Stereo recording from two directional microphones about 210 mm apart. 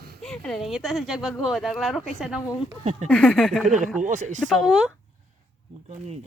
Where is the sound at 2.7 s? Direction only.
30° right (ahead or behind).